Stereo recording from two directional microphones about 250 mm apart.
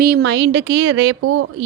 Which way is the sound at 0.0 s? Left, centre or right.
Right.